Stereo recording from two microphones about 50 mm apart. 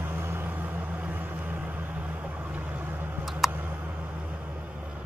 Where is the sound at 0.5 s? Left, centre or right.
Right.